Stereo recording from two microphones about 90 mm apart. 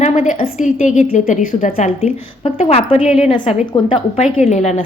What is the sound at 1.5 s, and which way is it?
Speech, 90° left.